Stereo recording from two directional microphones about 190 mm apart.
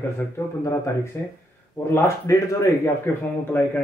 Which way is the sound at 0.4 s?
15° left (ahead or behind).